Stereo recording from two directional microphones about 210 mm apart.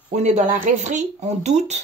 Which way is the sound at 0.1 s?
30° right (ahead or behind).